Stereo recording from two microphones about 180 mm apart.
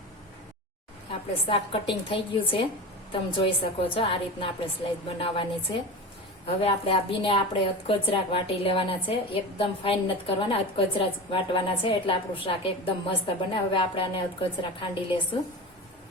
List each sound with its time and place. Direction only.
1.5 s a woman's voice: 30° left (ahead or behind)